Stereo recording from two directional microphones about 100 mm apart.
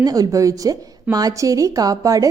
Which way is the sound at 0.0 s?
35° right (ahead or behind).